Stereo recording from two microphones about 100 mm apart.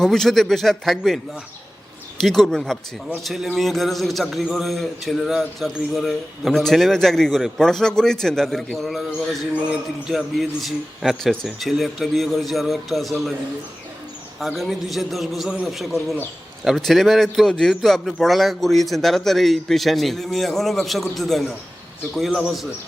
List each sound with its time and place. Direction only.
0.0 s a man's voice: 5° left (ahead or behind)
2.2 s a man's voice: 5° left (ahead or behind)
14.3 s a man's voice: centre (ahead or behind)